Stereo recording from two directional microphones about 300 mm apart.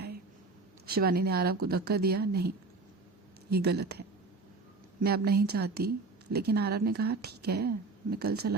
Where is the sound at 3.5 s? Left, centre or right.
Right.